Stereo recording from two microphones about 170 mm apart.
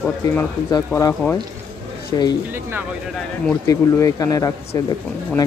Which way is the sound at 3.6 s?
20° left (ahead or behind).